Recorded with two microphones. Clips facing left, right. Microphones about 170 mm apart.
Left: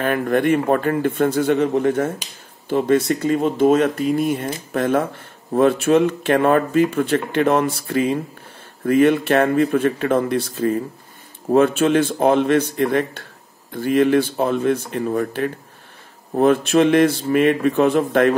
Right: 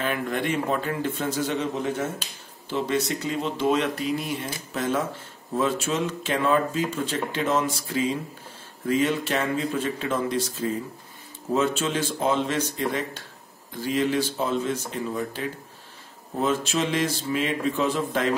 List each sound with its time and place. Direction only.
0.0 s speech: 55° left (ahead or behind)